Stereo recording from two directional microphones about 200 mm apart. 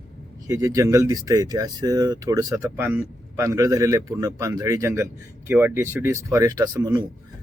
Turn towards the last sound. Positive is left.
turn(degrees=-15)  # may be behind; listen again after turning